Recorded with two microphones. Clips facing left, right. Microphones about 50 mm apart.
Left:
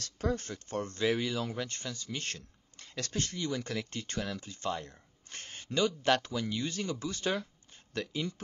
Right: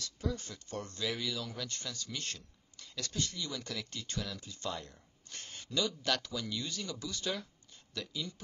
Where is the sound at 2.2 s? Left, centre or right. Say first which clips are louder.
Left 3 dB; left.